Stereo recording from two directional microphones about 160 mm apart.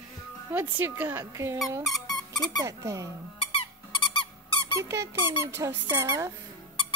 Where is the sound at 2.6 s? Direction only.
20° right (ahead or behind).